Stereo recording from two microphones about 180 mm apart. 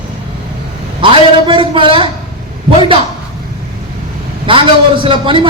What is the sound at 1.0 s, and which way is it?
A man's voice, 30° right (ahead or behind).